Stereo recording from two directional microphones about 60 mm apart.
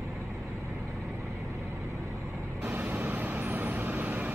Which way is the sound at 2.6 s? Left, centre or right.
Right.